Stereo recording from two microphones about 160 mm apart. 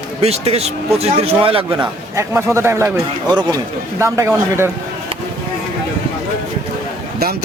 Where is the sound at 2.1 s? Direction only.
15° right (ahead or behind).